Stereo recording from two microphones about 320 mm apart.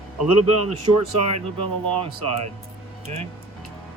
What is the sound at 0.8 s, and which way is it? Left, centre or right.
Speech, right.